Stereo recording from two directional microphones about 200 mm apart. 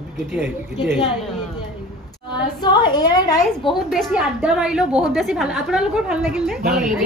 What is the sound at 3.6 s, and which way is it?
A woman's voice, centre (ahead or behind).